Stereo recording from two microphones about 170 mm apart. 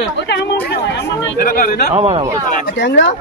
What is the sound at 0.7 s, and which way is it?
Speech, 70° left (ahead or behind).